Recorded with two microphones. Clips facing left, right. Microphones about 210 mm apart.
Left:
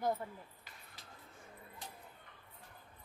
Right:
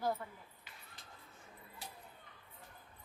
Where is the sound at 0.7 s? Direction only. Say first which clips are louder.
Left 1 dB; 40° left (ahead or behind).